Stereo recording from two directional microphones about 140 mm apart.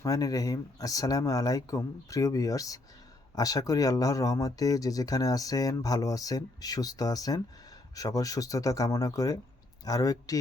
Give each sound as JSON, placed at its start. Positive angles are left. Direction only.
{"t": 0.0, "sound": "speech", "side_deg": 25}